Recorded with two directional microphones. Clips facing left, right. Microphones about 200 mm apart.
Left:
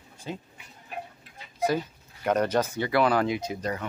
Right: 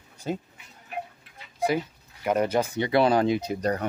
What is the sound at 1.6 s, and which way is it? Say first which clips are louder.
Speech: right 1 dB; 10° right (ahead or behind).